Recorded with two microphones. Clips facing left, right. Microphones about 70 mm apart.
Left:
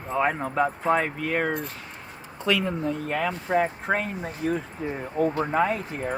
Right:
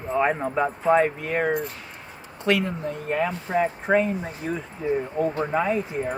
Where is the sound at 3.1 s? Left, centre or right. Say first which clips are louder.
Right 2 dB; left.